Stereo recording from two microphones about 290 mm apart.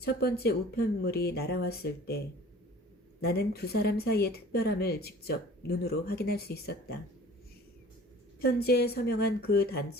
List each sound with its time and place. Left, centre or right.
0.0 s speech: left
8.4 s speech: left